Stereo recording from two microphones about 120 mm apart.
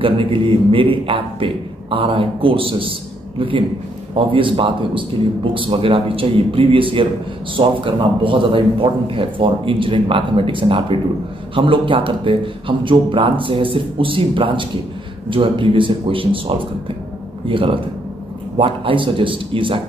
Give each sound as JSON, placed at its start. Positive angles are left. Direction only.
{"t": 0.0, "sound": "a man's voice", "side_deg": -45}